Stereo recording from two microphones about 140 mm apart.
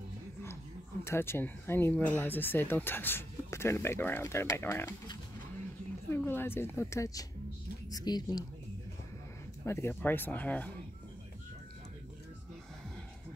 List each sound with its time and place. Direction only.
1.0 s speech: 20° left (ahead or behind)
6.0 s speech: 15° left (ahead or behind)
9.7 s speech: 15° left (ahead or behind)